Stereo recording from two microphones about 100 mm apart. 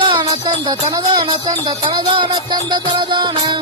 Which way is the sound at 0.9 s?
40° right (ahead or behind).